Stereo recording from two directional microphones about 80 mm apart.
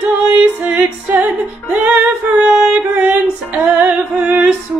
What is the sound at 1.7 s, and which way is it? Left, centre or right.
Female singing, centre.